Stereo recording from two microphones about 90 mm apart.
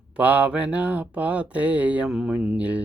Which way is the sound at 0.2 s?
15° right (ahead or behind).